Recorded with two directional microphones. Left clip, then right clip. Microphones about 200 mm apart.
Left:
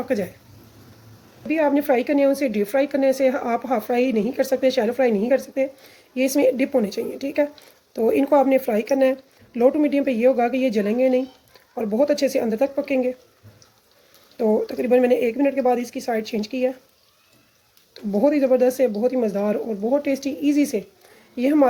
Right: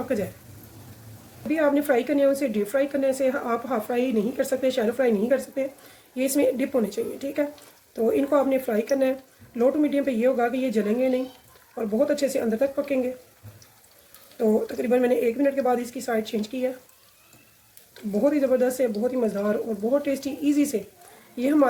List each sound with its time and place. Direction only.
1.5 s speech: 40° left (ahead or behind)
14.3 s speech: 45° left (ahead or behind)
18.2 s speech: 40° left (ahead or behind)